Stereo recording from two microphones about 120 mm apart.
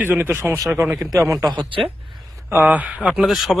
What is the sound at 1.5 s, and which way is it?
Speech, 45° right (ahead or behind).